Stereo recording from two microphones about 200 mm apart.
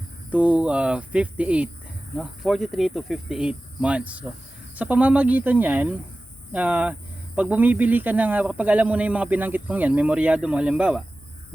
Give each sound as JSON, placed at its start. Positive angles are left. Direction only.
{"t": 0.3, "sound": "speech", "side_deg": -5}